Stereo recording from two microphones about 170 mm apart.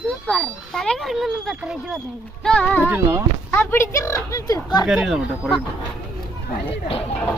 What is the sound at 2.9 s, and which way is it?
Speech, 15° right (ahead or behind).